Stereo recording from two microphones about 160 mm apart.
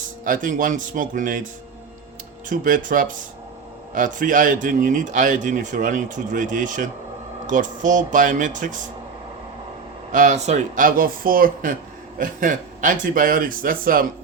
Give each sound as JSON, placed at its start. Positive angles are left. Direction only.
{"t": 0.3, "sound": "speech", "side_deg": -55}
{"t": 2.5, "sound": "a man's voice", "side_deg": -55}
{"t": 10.1, "sound": "speech", "side_deg": -50}